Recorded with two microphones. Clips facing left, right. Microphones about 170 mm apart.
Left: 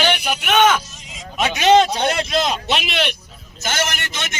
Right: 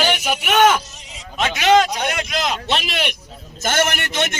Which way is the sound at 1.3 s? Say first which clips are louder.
Left 1 dB; 15° left (ahead or behind).